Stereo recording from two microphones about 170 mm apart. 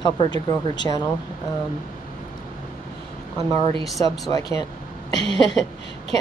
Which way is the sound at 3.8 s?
Centre (ahead or behind).